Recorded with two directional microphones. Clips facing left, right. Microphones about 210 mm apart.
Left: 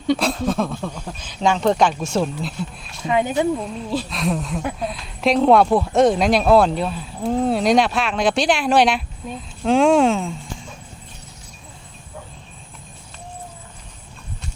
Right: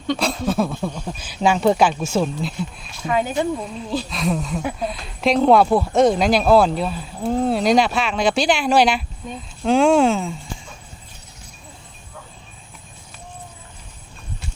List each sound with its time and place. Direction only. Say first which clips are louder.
0.2 s speech: even; centre (ahead or behind)
3.1 s speech: left 1 dB; 20° left (ahead or behind)
3.5 s speech: left 1 dB; centre (ahead or behind)